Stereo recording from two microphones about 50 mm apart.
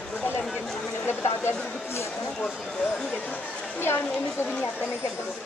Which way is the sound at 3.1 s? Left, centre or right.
Left.